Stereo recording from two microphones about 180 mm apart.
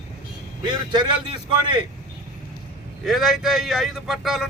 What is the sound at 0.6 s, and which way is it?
A man's voice, 25° right (ahead or behind).